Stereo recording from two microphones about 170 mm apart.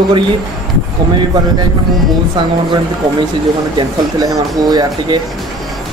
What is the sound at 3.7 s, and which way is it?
Speech, 20° right (ahead or behind).